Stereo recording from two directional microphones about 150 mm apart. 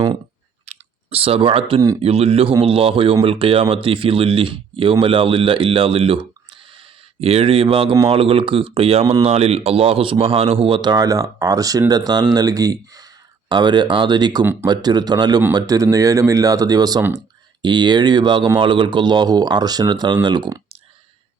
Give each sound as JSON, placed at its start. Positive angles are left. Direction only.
{"t": 0.6, "sound": "chewing", "side_deg": -45}
{"t": 2.0, "sound": "speech", "side_deg": -40}
{"t": 14.4, "sound": "speech", "side_deg": -15}
{"t": 14.7, "sound": "speech", "side_deg": -25}